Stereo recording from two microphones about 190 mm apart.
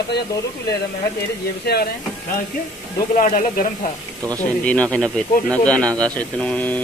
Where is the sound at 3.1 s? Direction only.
40° left (ahead or behind).